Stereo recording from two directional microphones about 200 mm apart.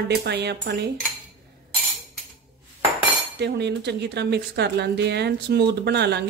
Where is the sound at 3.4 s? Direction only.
55° right (ahead or behind).